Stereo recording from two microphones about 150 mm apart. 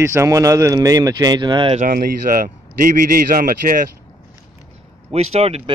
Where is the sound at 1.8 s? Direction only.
65° right (ahead or behind).